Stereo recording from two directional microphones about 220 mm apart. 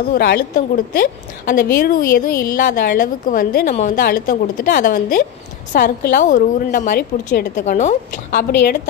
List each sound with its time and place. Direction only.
0.1 s a woman's voice: 45° left (ahead or behind)